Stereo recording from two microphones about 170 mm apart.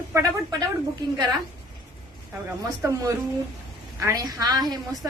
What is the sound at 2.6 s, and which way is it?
A woman's voice, 20° right (ahead or behind).